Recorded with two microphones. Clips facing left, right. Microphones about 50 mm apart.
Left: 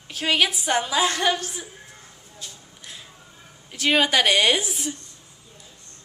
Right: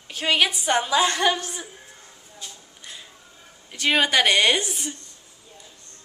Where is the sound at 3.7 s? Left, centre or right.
Centre.